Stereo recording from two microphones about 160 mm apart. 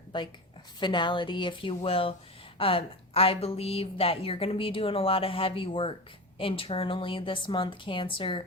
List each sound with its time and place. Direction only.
0.1 s a woman's voice: 30° left (ahead or behind)